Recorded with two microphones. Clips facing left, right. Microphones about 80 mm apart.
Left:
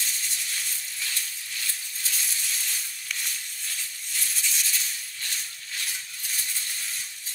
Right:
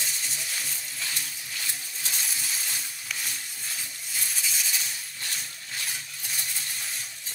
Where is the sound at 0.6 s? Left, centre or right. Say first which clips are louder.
Even; centre.